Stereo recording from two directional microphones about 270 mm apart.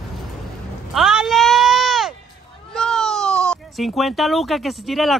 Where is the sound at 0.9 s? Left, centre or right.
Centre.